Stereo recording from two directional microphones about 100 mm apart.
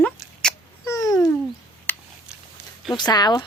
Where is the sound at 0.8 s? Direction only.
35° left (ahead or behind).